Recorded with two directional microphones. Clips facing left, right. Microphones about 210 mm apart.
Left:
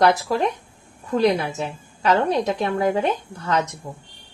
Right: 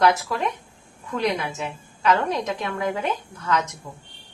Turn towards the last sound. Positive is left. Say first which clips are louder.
# left 2 dB
turn(degrees=35)  # may be behind; listen again after turning